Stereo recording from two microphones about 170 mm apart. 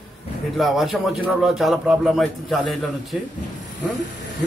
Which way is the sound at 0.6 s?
Centre (ahead or behind).